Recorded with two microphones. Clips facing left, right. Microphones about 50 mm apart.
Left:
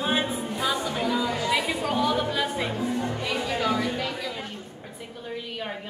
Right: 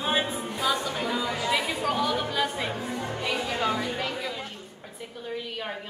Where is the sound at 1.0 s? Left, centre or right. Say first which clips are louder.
Left 2 dB; centre.